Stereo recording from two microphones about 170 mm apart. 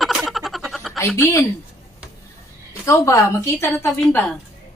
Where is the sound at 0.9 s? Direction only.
15° left (ahead or behind).